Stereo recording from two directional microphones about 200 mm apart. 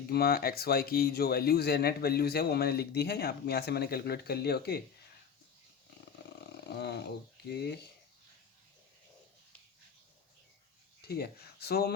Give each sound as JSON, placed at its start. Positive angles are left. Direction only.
{"t": 0.1, "sound": "speech", "side_deg": 50}
{"t": 6.4, "sound": "speech", "side_deg": 55}
{"t": 11.0, "sound": "speech", "side_deg": 50}